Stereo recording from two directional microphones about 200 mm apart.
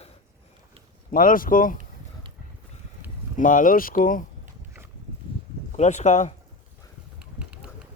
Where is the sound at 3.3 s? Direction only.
40° left (ahead or behind).